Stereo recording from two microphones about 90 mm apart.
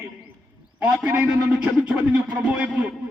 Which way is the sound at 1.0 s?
15° right (ahead or behind).